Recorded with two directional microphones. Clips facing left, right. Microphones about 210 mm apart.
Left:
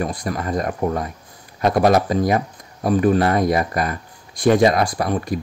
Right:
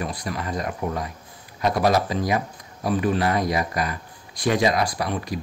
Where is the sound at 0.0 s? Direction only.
45° left (ahead or behind).